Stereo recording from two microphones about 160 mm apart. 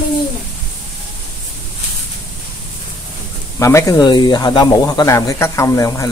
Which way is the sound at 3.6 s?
20° left (ahead or behind).